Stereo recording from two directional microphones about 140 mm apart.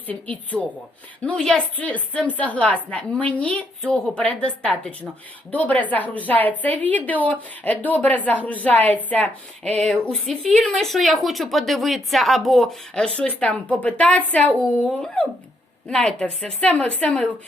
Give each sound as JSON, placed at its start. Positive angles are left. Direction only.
{"t": 0.1, "sound": "a woman's voice", "side_deg": 10}